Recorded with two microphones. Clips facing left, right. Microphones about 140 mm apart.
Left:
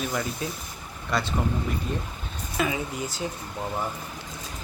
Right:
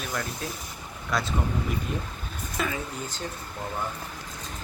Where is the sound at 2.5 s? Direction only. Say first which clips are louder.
Left 4 dB; 10° left (ahead or behind).